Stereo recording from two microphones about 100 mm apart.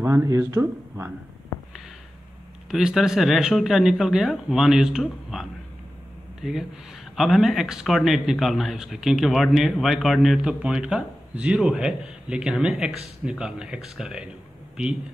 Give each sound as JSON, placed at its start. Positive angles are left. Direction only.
{"t": 0.0, "sound": "speech", "side_deg": -25}
{"t": 2.7, "sound": "speech", "side_deg": -5}
{"t": 7.2, "sound": "speech", "side_deg": 0}